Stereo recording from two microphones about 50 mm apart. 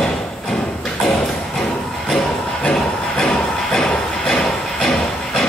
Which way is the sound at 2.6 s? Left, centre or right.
Centre.